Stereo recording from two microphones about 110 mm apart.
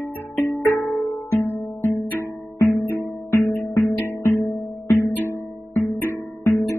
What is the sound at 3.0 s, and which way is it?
Music, 30° left (ahead or behind).